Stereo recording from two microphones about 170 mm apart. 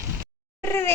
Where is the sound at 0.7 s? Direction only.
15° left (ahead or behind).